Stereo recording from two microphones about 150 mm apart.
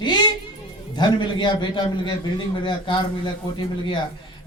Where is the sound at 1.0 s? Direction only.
30° left (ahead or behind).